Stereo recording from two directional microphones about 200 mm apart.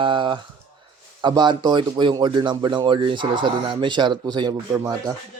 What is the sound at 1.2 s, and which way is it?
Speech, 20° right (ahead or behind).